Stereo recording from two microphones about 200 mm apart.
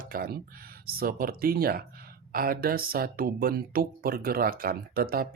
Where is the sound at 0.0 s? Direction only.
45° right (ahead or behind).